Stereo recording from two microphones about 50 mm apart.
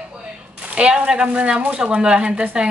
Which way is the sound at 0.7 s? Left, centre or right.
Centre.